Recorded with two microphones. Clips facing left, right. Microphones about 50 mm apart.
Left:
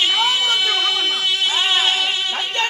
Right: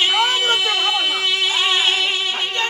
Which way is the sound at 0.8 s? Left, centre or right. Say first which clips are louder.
Right 1 dB; right.